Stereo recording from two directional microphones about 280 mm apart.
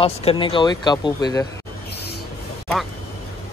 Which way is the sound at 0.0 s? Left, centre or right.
Centre.